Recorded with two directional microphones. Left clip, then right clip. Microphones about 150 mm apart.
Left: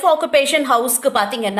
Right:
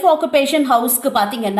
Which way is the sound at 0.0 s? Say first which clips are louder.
Right 1 dB; 35° left (ahead or behind).